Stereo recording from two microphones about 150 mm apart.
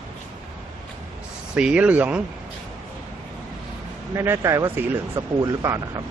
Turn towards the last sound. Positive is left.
turn(degrees=-20)  # may be behind; listen again after turning